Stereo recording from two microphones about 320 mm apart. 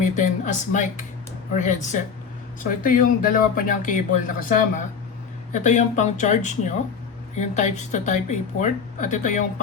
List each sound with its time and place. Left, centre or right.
0.0 s speech: left